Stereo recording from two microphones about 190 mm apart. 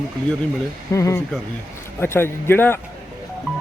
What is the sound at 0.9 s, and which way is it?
Speech, 15° left (ahead or behind).